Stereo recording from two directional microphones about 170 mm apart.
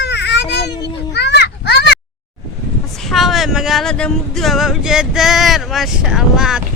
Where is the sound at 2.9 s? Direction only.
Centre (ahead or behind).